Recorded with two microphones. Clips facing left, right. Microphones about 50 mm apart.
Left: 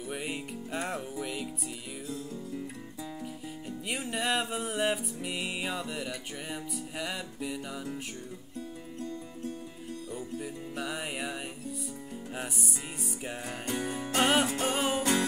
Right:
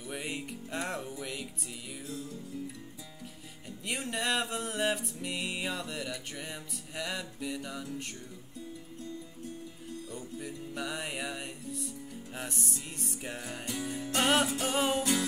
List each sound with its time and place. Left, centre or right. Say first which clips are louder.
0.1 s music: left 1 dB; centre
3.8 s music: left 1 dB; centre
10.1 s music: left 5 dB; centre
13.5 s music: left 4 dB; left
14.1 s music: left 1 dB; centre